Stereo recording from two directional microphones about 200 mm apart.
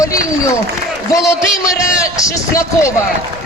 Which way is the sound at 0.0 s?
15° left (ahead or behind).